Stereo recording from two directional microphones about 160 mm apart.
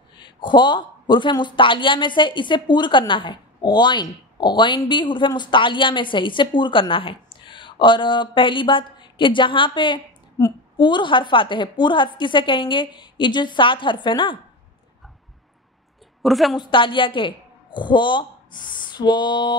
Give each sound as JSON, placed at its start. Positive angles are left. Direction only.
{"t": 0.2, "sound": "speech", "side_deg": 30}
{"t": 16.2, "sound": "a woman's voice", "side_deg": 0}
{"t": 16.5, "sound": "a woman's voice", "side_deg": 30}